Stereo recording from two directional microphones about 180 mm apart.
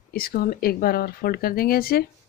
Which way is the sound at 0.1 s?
55° left (ahead or behind).